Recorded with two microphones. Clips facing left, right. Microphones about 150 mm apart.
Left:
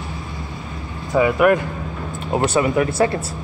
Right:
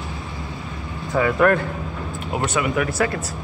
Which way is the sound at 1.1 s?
15° left (ahead or behind).